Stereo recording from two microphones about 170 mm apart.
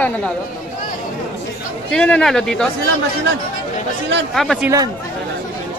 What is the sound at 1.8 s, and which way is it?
Speech, 5° left (ahead or behind).